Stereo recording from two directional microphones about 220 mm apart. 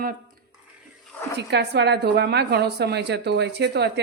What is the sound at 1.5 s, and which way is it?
A woman's voice, 50° right (ahead or behind).